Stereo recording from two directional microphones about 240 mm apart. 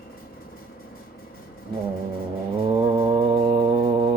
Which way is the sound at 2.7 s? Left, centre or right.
Centre.